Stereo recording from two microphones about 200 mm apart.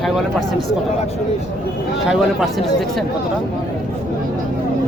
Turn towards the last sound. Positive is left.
turn(degrees=0)  # may be behind; listen again after turning